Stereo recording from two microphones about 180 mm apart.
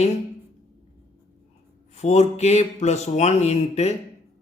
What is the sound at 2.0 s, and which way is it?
Speech, 40° left (ahead or behind).